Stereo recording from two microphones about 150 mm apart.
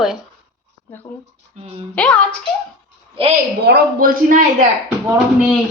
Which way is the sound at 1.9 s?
5° left (ahead or behind).